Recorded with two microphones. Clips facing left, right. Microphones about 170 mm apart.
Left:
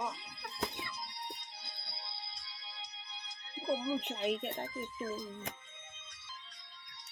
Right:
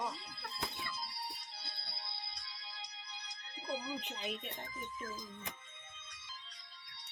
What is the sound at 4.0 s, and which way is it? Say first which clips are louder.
Speech: left 8 dB; 65° left (ahead or behind).